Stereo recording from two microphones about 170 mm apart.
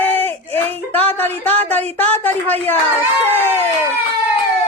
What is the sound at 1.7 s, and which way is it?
A woman's voice, 10° left (ahead or behind).